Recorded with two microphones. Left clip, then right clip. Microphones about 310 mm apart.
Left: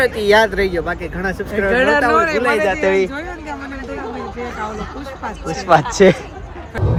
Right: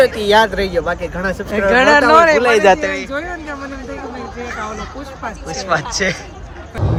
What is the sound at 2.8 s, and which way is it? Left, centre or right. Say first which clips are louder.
Speech: left 5 dB; centre.